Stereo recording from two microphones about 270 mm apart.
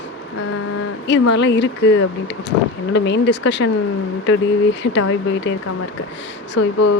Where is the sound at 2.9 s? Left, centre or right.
Left.